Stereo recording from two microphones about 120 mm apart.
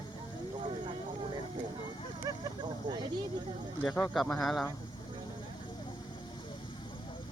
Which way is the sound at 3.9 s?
10° left (ahead or behind).